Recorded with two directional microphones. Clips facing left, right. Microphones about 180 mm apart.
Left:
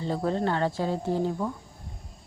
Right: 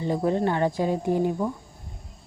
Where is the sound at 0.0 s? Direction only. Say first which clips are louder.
Right 3 dB; 15° right (ahead or behind).